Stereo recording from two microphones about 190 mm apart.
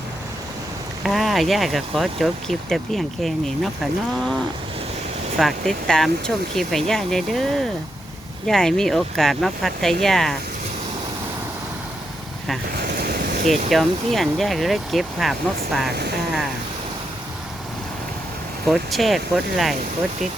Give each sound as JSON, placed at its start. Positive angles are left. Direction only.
{"t": 1.0, "sound": "speech", "side_deg": 0}
{"t": 5.4, "sound": "speech", "side_deg": 0}
{"t": 12.7, "sound": "waves", "side_deg": -55}
{"t": 13.7, "sound": "speech", "side_deg": 0}
{"t": 18.7, "sound": "speech", "side_deg": 0}